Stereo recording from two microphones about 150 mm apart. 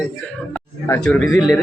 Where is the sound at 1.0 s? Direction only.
5° left (ahead or behind).